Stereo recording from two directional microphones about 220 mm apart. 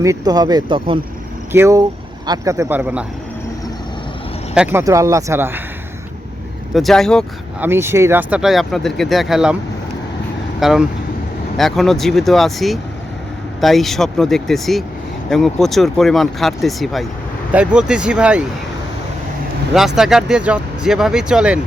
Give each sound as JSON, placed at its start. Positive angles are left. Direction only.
{"t": 0.0, "sound": "speech", "side_deg": -15}
{"t": 4.5, "sound": "speech", "side_deg": -10}
{"t": 6.7, "sound": "speech", "side_deg": 0}
{"t": 7.6, "sound": "speech", "side_deg": -10}
{"t": 10.6, "sound": "speech", "side_deg": 0}
{"t": 20.0, "sound": "speech", "side_deg": 0}